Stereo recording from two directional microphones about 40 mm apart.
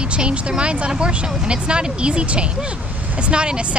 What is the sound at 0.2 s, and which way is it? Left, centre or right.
Speech, right.